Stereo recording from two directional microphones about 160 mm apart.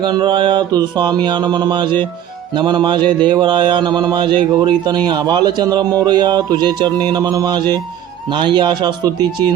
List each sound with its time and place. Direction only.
0.0 s a man's voice: 30° right (ahead or behind)